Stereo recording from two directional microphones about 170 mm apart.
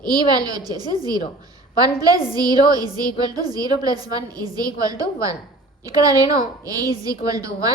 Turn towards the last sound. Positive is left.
turn(degrees=-20)  # may be behind; listen again after turning